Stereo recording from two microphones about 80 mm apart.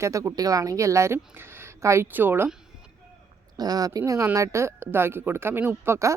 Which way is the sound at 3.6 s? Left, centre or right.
Right.